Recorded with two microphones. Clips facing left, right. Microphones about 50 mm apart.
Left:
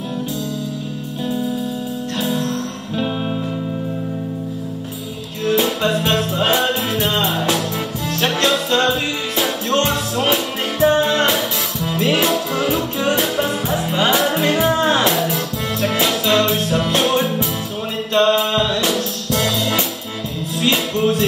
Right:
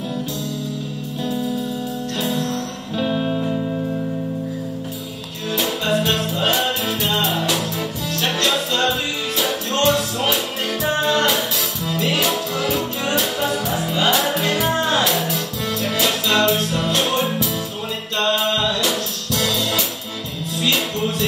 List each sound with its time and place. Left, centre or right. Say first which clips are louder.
2.2 s music: left 2 dB; left
5.5 s music: left 3 dB; left
20.6 s music: left 4 dB; left